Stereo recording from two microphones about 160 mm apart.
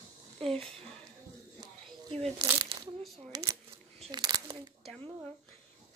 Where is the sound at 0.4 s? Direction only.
35° right (ahead or behind).